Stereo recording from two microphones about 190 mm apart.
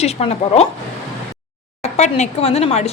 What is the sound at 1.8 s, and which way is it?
A woman's voice, 35° left (ahead or behind).